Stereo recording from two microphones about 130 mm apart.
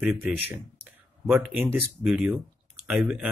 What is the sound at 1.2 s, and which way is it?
Speech, 15° right (ahead or behind).